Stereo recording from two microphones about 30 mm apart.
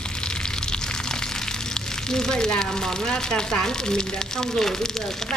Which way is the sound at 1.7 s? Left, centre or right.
Left.